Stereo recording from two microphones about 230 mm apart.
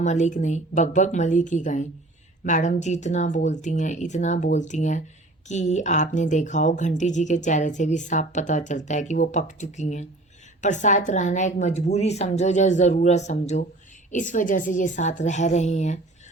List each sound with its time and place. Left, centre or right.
0.0 s speech: left